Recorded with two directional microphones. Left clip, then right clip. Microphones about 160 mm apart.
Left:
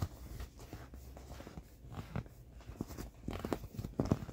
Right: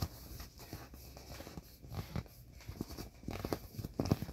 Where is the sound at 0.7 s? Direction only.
5° left (ahead or behind).